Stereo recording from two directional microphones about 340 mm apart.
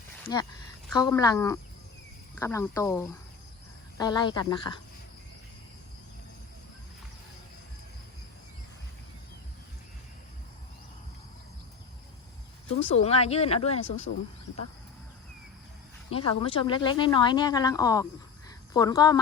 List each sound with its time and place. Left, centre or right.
0.9 s a woman's voice: centre
12.7 s a woman's voice: centre
16.0 s a woman's voice: centre